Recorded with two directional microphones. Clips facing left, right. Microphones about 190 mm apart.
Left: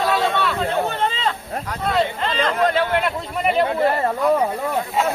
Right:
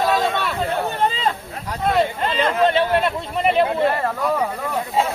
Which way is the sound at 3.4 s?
Centre (ahead or behind).